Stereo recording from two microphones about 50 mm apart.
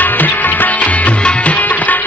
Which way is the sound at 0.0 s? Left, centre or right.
Left.